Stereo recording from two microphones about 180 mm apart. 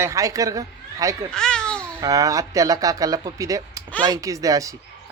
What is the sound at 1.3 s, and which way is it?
Babbling, 5° left (ahead or behind).